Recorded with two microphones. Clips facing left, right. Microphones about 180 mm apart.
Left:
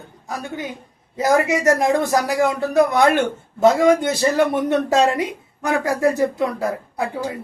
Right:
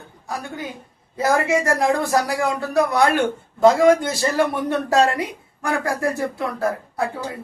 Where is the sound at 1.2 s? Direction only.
20° left (ahead or behind).